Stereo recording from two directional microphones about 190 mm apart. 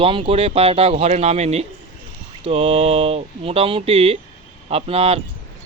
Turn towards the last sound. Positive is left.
turn(degrees=-30)  # may be behind; listen again after turning